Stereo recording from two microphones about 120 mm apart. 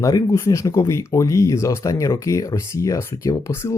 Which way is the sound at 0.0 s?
30° left (ahead or behind).